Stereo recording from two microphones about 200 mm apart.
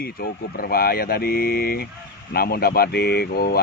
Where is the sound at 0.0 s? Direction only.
50° left (ahead or behind).